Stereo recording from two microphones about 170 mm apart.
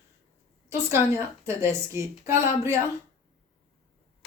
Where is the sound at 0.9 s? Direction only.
15° right (ahead or behind).